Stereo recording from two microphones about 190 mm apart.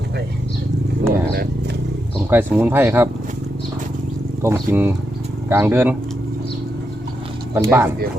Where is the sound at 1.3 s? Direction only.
55° right (ahead or behind).